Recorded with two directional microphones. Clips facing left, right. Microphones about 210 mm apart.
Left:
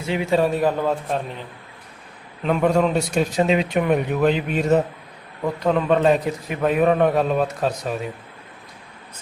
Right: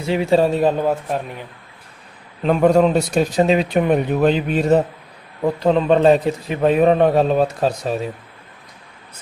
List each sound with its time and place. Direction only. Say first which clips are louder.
0.1 s speech: right 4 dB; 35° right (ahead or behind)
2.4 s a man's voice: right 5 dB; 35° right (ahead or behind)